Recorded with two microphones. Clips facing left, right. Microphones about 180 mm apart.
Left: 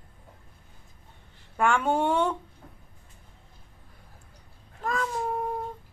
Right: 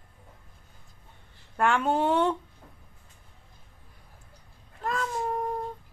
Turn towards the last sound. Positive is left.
turn(degrees=5)  # may be behind; listen again after turning